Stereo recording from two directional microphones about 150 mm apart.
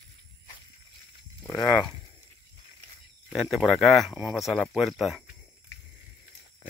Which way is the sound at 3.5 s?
Centre (ahead or behind).